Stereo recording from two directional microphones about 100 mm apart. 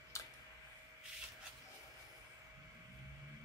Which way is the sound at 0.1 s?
30° left (ahead or behind).